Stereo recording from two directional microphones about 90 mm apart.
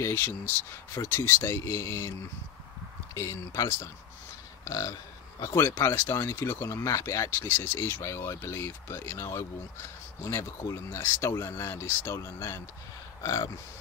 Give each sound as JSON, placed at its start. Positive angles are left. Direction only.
{"t": 0.0, "sound": "speech", "side_deg": 25}
{"t": 3.2, "sound": "speech", "side_deg": 35}